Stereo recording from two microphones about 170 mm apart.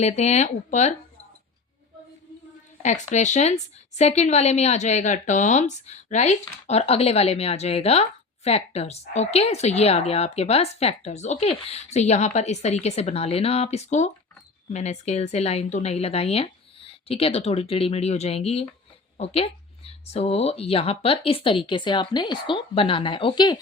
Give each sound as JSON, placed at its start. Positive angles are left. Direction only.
{"t": 0.0, "sound": "speech", "side_deg": 40}
{"t": 2.8, "sound": "speech", "side_deg": 45}